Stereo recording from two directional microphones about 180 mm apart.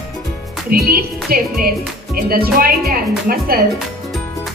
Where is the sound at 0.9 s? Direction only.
55° right (ahead or behind).